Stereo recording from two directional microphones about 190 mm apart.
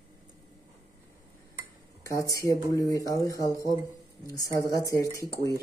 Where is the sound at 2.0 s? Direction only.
15° left (ahead or behind).